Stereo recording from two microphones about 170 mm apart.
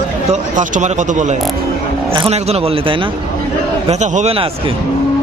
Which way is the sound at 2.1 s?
35° right (ahead or behind).